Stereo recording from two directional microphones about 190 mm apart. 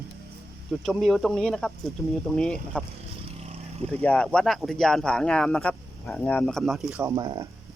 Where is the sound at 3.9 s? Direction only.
5° left (ahead or behind).